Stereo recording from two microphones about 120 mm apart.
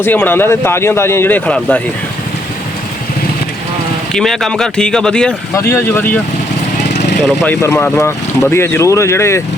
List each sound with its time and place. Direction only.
0.0 s speech: 15° left (ahead or behind)
1.5 s speech: 5° left (ahead or behind)
4.1 s speech: 5° left (ahead or behind)
5.5 s speech: 25° left (ahead or behind)
7.4 s speech: 20° left (ahead or behind)